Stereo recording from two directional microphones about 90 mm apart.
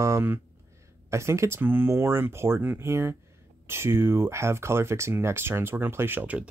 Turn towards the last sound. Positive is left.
turn(degrees=-20)  # may be behind; listen again after turning